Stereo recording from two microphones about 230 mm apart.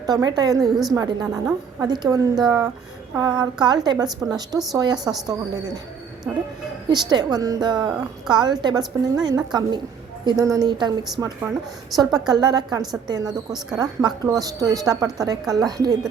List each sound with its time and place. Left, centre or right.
0.0 s a woman's voice: centre
4.5 s a woman's voice: centre
4.8 s a woman's voice: centre
6.3 s a woman's voice: centre
6.9 s a woman's voice: centre